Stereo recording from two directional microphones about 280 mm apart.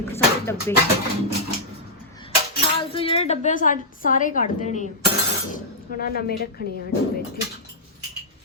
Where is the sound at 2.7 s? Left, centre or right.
Centre.